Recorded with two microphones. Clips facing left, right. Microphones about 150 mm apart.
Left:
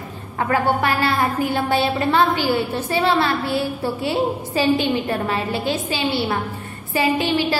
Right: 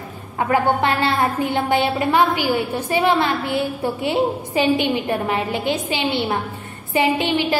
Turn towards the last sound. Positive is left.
turn(degrees=-20)  # may be behind; listen again after turning